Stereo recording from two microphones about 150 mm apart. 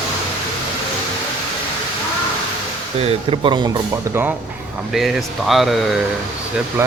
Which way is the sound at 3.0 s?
40° right (ahead or behind).